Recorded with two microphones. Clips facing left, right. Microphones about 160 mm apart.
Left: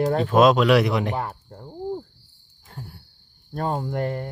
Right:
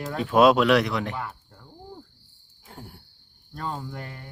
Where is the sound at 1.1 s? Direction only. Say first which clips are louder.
Left 6 dB; 40° left (ahead or behind).